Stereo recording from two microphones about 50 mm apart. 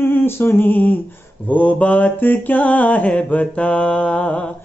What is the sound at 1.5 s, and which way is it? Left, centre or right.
Mantra, left.